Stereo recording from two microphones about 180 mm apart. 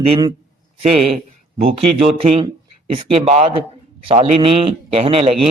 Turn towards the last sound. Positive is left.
turn(degrees=-35)  # may be behind; listen again after turning